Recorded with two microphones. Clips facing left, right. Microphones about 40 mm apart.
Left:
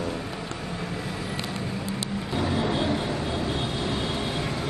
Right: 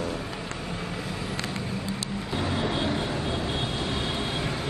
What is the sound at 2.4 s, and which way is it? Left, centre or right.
Vehicle, centre.